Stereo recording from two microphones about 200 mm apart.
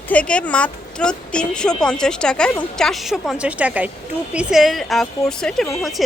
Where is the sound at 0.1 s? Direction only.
5° left (ahead or behind).